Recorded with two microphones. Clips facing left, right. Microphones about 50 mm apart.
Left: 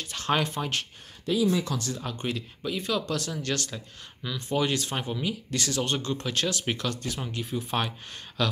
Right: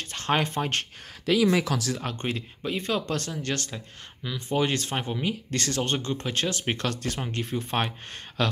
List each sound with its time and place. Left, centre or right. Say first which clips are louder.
0.0 s speech: right 1 dB; right
1.2 s speech: right 3 dB; right
2.0 s speech: right 2 dB; right
2.2 s speech: left 1 dB; right
3.7 s speech: right 1 dB; centre
4.5 s speech: right 1 dB; right
5.8 s speech: even; right
6.8 s speech: right 2 dB; right
8.4 s speech: right 1 dB; right